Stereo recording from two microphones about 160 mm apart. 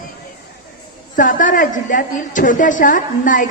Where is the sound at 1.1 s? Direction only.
55° left (ahead or behind).